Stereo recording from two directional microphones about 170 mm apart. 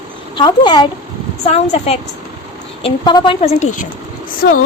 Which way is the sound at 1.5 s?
40° left (ahead or behind).